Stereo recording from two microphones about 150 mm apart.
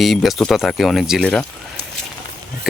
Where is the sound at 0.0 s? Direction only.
Centre (ahead or behind).